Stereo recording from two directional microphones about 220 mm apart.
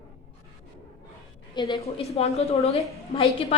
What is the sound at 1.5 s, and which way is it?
A woman's voice, 20° left (ahead or behind).